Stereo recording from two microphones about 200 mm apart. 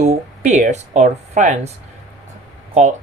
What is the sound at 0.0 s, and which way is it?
Speech, 35° right (ahead or behind).